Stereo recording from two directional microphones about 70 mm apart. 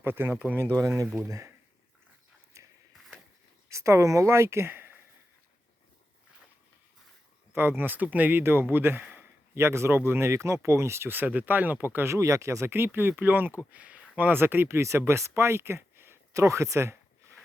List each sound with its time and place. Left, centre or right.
0.0 s a man's voice: right
0.7 s speech: right
2.5 s a sound: right
3.7 s speech: right
7.5 s a man's voice: right
12.0 s a man's voice: right
16.3 s speech: right